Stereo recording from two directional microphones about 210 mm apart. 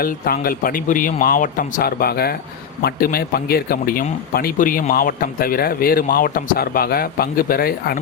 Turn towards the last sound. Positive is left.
turn(degrees=45)  # may be behind; listen again after turning